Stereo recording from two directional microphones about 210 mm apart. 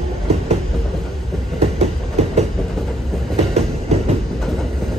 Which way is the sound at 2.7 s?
Centre (ahead or behind).